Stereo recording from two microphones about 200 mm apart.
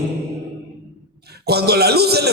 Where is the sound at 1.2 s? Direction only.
55° right (ahead or behind).